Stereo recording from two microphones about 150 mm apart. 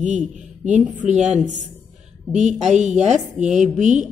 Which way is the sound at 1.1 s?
50° right (ahead or behind).